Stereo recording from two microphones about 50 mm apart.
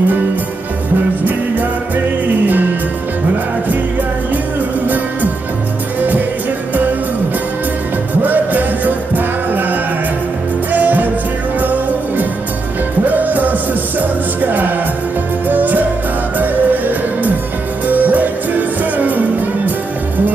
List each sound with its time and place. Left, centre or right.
4.8 s music: right
8.2 s music: right